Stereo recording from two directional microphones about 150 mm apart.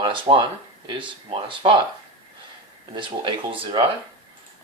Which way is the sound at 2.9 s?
30° right (ahead or behind).